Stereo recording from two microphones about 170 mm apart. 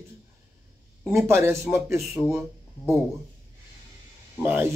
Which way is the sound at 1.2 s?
15° right (ahead or behind).